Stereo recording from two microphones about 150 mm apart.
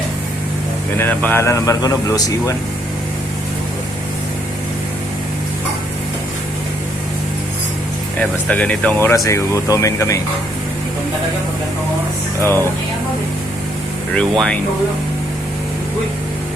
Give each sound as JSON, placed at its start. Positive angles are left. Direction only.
{"t": 0.9, "sound": "speech", "side_deg": 15}
{"t": 8.2, "sound": "speech", "side_deg": 10}
{"t": 14.1, "sound": "speech", "side_deg": 5}